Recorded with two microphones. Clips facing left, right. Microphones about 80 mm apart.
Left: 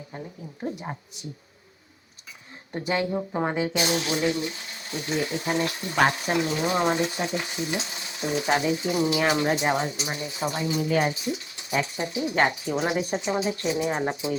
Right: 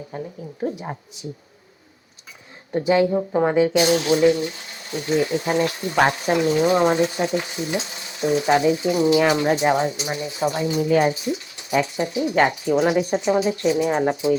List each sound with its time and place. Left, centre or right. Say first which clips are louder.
2.7 s speech: right 8 dB; centre
3.3 s speech: right 8 dB; centre
3.8 s speech: right 8 dB; right